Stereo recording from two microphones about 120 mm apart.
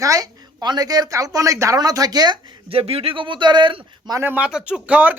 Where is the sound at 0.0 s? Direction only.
30° right (ahead or behind).